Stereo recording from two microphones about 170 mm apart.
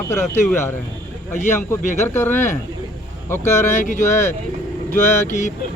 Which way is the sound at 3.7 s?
45° left (ahead or behind).